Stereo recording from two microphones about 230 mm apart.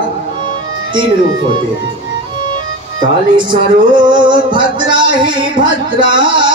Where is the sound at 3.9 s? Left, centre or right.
Centre.